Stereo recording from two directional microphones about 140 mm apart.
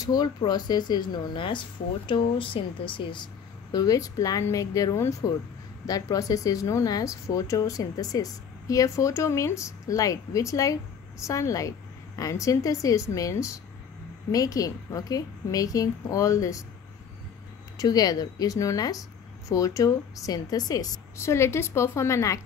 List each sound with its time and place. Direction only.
0.0 s speech: 30° left (ahead or behind)
3.7 s speech: 25° left (ahead or behind)
17.7 s speech: 25° left (ahead or behind)